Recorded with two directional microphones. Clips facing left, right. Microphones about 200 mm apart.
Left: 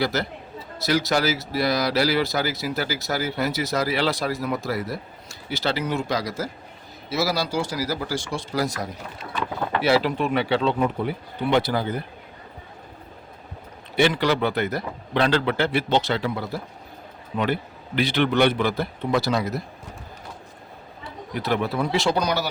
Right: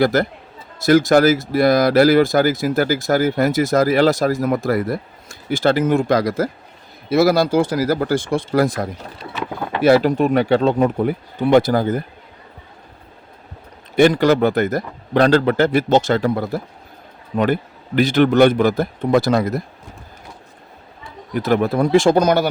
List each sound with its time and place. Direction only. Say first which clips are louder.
0.0 s speech: right 8 dB; 50° right (ahead or behind)
13.9 s speech: right 8 dB; 45° right (ahead or behind)
21.0 s speech: right 6 dB; 50° right (ahead or behind)